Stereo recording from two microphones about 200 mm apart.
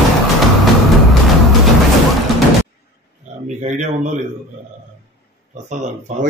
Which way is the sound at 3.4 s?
35° right (ahead or behind).